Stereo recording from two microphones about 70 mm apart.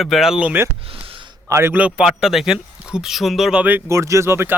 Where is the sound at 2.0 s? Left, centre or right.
Centre.